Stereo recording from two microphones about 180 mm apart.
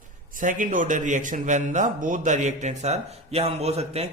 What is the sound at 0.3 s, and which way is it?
Speech, 45° right (ahead or behind).